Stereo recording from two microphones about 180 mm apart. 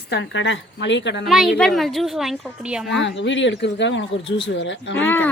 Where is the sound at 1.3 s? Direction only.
Centre (ahead or behind).